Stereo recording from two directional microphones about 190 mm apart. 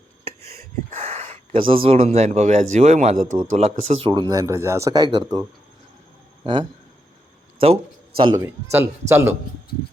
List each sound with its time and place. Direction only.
0.3 s a sound: 35° right (ahead or behind)
1.5 s speech: 30° right (ahead or behind)
8.7 s speech: 15° right (ahead or behind)